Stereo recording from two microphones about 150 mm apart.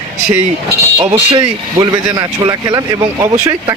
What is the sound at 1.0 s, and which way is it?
A man's voice, 25° right (ahead or behind).